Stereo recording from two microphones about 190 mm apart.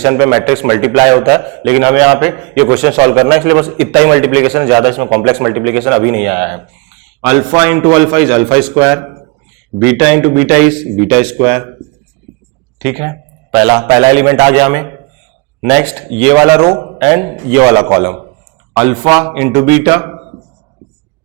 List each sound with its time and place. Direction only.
0.0 s a man's voice: 15° right (ahead or behind)
12.8 s a man's voice: 15° right (ahead or behind)